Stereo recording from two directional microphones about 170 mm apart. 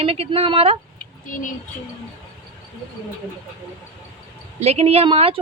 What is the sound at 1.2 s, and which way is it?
Speech, 50° left (ahead or behind).